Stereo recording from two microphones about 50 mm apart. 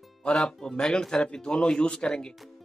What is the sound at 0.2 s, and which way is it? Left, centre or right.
Speech, centre.